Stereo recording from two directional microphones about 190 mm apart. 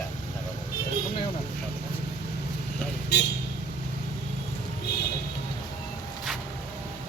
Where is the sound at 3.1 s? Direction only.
60° left (ahead or behind).